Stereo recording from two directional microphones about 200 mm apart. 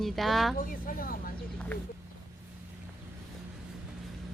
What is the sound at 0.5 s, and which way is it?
Speech, 45° left (ahead or behind).